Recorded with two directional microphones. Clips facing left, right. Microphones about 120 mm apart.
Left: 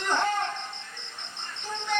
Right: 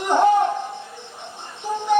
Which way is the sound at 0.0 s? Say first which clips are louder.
Right 11 dB; 15° right (ahead or behind).